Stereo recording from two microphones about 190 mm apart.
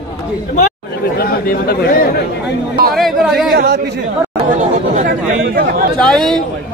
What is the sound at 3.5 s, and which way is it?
Speech, 60° right (ahead or behind).